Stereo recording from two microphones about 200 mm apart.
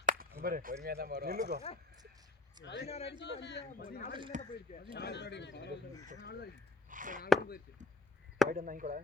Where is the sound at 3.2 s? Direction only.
60° left (ahead or behind).